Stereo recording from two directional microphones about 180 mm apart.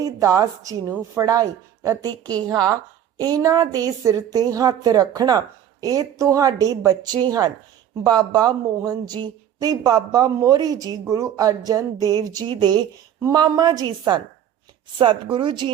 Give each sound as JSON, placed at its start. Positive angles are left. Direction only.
{"t": 0.0, "sound": "speech", "side_deg": -15}